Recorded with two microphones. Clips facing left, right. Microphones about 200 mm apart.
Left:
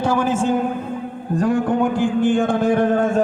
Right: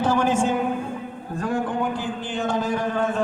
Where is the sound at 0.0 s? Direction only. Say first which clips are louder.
Left 2 dB; 10° left (ahead or behind).